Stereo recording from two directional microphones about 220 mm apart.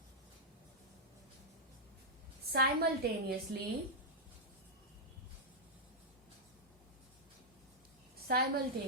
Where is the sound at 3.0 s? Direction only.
45° right (ahead or behind).